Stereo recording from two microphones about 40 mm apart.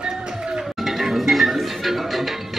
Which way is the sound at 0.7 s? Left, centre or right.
Centre.